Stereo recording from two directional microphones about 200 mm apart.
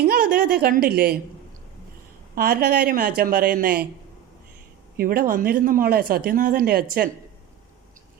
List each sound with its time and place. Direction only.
0.1 s a sound: 45° right (ahead or behind)
2.3 s speech: 50° right (ahead or behind)
4.9 s speech: 45° right (ahead or behind)